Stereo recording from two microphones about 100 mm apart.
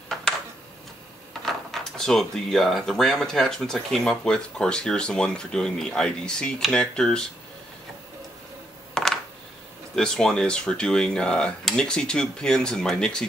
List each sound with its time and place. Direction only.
1.4 s speech: 5° left (ahead or behind)
8.9 s coin: 5° left (ahead or behind)
9.9 s speech: 5° left (ahead or behind)